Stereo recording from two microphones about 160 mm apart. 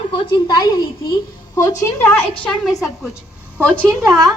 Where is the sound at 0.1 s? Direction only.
25° left (ahead or behind).